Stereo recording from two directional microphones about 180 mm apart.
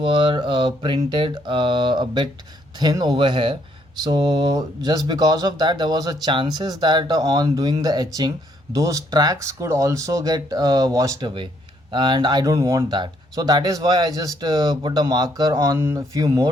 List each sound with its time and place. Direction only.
0.0 s speech: 30° right (ahead or behind)